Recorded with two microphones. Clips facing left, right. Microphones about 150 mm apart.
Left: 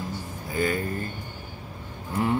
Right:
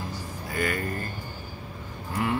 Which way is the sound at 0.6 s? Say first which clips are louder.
Left 3 dB; 55° right (ahead or behind).